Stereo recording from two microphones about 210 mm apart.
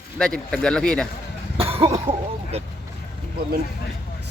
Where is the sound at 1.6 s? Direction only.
25° right (ahead or behind).